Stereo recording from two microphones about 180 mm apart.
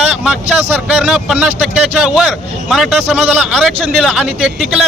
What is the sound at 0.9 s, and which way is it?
A man's voice, centre (ahead or behind).